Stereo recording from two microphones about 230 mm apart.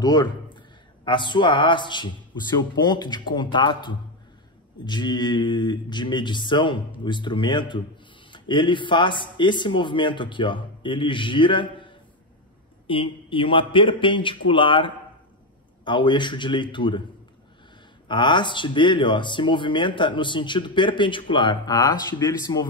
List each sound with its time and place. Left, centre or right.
0.0 s a man's voice: centre
18.0 s speech: centre